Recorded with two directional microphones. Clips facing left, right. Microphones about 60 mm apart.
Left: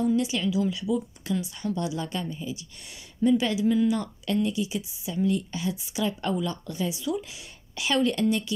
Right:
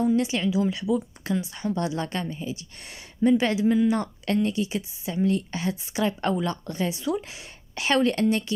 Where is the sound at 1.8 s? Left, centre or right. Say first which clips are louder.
Right 3 dB; right.